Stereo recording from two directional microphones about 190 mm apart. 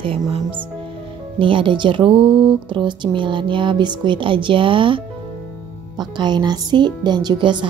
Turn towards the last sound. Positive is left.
turn(degrees=-25)  # may be behind; listen again after turning